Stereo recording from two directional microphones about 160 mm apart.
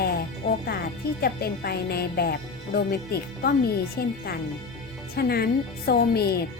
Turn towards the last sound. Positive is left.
turn(degrees=80)